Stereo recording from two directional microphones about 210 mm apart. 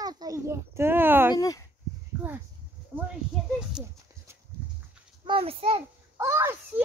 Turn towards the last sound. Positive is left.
turn(degrees=-10)  # may be behind; listen again after turning